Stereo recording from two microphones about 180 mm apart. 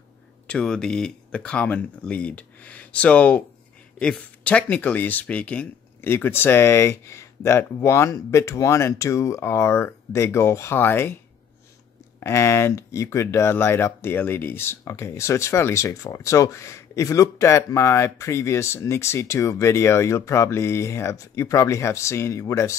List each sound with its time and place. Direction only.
0.5 s speech: 5° left (ahead or behind)
12.2 s speech: 15° left (ahead or behind)